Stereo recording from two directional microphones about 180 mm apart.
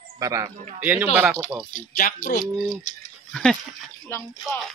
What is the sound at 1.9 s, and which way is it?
Speech, 50° left (ahead or behind).